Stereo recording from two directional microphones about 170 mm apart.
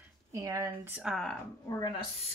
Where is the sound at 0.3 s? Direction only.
20° right (ahead or behind).